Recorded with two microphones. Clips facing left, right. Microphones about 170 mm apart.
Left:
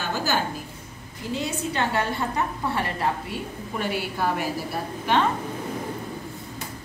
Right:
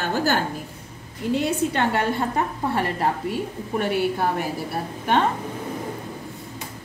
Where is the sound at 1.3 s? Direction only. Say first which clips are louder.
Right 4 dB; 55° right (ahead or behind).